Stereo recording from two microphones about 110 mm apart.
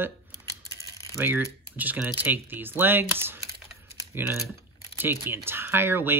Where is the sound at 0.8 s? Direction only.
30° left (ahead or behind).